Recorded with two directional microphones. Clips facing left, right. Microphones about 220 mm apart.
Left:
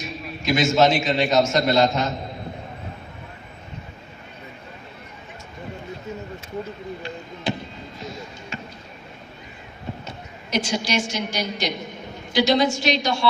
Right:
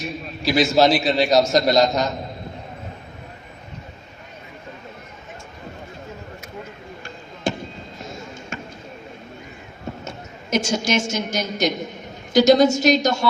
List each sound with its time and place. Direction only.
0.4 s a man's voice: 35° right (ahead or behind)
7.5 s basketball bounce: 45° right (ahead or behind)
10.0 s a woman's voice: 45° right (ahead or behind)